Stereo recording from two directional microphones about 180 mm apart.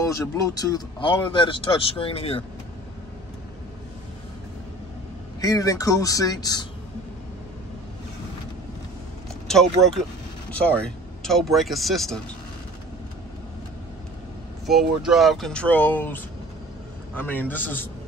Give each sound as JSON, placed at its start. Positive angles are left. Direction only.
{"t": 0.0, "sound": "speech", "side_deg": 20}
{"t": 5.4, "sound": "speech", "side_deg": 20}
{"t": 9.5, "sound": "speech", "side_deg": 0}
{"t": 14.7, "sound": "a man's voice", "side_deg": 0}